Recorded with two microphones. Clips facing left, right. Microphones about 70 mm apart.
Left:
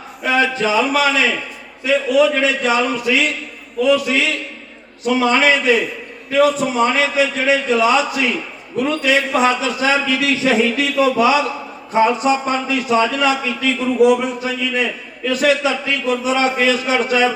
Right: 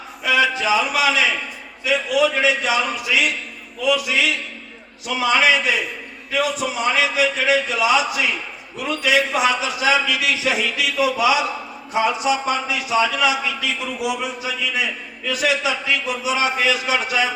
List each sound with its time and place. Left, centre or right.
0.2 s a man's voice: left